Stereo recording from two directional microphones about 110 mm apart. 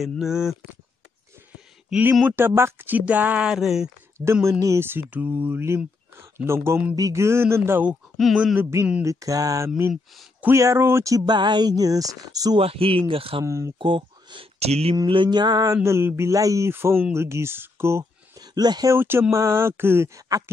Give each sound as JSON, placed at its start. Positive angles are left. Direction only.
{"t": 0.0, "sound": "speech", "side_deg": -5}
{"t": 1.5, "sound": "a sound", "side_deg": -15}
{"t": 2.2, "sound": "speech", "side_deg": -20}
{"t": 4.2, "sound": "speech", "side_deg": -25}
{"t": 7.9, "sound": "speech", "side_deg": 0}
{"t": 8.5, "sound": "speech", "side_deg": -25}
{"t": 12.5, "sound": "speech", "side_deg": -60}
{"t": 13.4, "sound": "speech", "side_deg": -25}
{"t": 13.7, "sound": "speech", "side_deg": -50}
{"t": 14.6, "sound": "speech", "side_deg": -70}
{"t": 15.0, "sound": "speech", "side_deg": -45}
{"t": 18.4, "sound": "speech", "side_deg": -40}
{"t": 18.9, "sound": "speech", "side_deg": -20}